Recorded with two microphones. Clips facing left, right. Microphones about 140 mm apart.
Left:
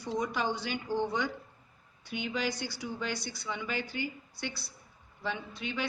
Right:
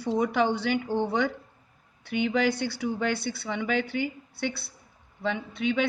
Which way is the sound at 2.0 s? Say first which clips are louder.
Right 9 dB; 55° right (ahead or behind).